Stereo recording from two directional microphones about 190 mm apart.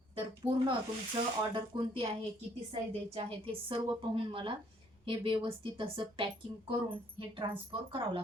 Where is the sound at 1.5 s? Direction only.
25° right (ahead or behind).